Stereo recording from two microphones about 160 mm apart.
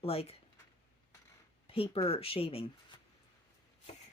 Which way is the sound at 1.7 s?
35° left (ahead or behind).